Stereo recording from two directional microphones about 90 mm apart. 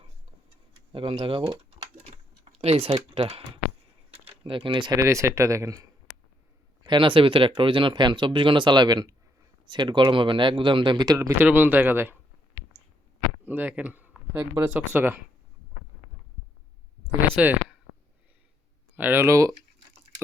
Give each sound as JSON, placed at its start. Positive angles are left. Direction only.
{"t": 1.2, "sound": "speech", "side_deg": -75}
{"t": 2.4, "sound": "typing", "side_deg": -90}
{"t": 2.9, "sound": "speech", "side_deg": -70}
{"t": 4.9, "sound": "speech", "side_deg": -35}
{"t": 6.8, "sound": "speech", "side_deg": -65}
{"t": 11.2, "sound": "speech", "side_deg": -30}
{"t": 13.4, "sound": "speech", "side_deg": -20}
{"t": 17.2, "sound": "speech", "side_deg": -20}
{"t": 18.9, "sound": "speech", "side_deg": -20}